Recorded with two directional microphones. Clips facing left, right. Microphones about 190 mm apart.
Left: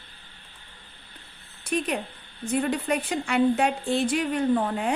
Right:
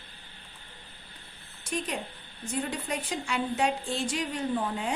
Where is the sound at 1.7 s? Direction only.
60° left (ahead or behind).